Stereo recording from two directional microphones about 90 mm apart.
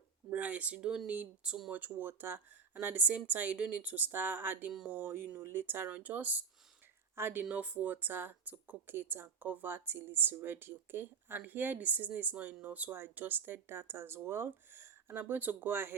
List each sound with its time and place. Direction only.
0.3 s speech: 15° right (ahead or behind)